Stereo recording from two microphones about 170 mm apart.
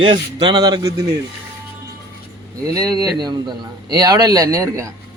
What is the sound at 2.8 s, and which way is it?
A man's voice, 20° right (ahead or behind).